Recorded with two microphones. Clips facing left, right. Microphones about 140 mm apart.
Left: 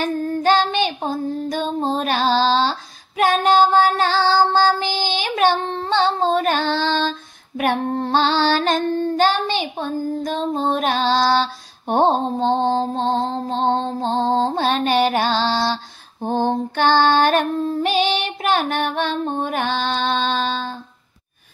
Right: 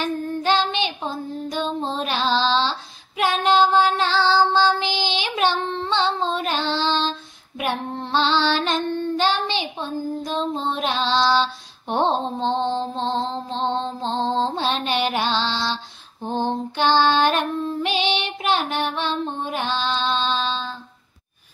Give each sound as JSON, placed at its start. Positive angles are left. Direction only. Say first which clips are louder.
{"t": 0.0, "sound": "child singing", "louder": "left 4 dB", "side_deg": 45}
{"t": 11.9, "sound": "music", "louder": "left 4 dB", "side_deg": 45}